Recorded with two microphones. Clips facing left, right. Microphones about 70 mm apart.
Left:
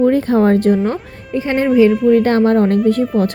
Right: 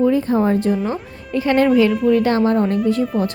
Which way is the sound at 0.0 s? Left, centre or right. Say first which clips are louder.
Left 4 dB; left.